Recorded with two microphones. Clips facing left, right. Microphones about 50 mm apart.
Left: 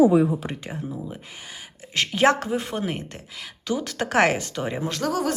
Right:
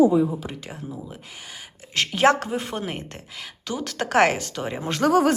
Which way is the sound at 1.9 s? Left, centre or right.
Centre.